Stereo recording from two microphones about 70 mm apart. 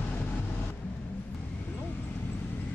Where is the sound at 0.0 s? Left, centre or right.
Centre.